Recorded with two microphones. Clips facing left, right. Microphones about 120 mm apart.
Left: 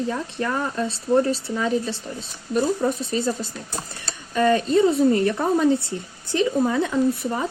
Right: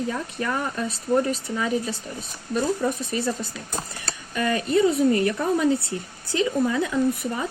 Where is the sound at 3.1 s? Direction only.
25° left (ahead or behind).